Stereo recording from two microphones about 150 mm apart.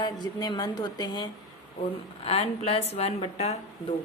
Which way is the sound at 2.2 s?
40° left (ahead or behind).